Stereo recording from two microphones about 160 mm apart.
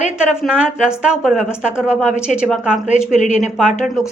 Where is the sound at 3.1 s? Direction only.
50° left (ahead or behind).